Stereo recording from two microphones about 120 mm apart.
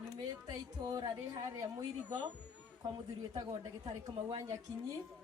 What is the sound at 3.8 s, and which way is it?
Speech, 30° right (ahead or behind).